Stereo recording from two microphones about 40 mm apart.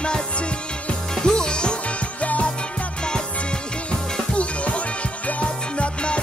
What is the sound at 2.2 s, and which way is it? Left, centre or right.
Music, left.